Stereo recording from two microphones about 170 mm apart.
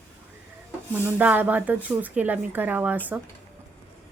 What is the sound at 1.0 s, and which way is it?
Speech, 10° right (ahead or behind).